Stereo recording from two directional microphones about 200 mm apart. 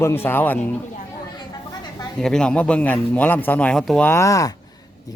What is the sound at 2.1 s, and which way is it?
Speech, 5° left (ahead or behind).